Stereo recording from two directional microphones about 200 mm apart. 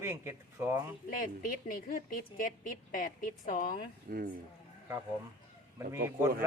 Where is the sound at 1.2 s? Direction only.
45° left (ahead or behind).